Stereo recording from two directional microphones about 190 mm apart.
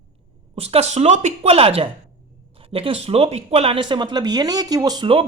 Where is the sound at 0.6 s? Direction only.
35° right (ahead or behind).